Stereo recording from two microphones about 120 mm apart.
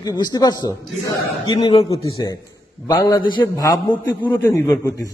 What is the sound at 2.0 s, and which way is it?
A man's voice, 30° left (ahead or behind).